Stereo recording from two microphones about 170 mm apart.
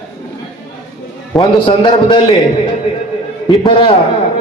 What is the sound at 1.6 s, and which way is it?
Speech, 30° left (ahead or behind).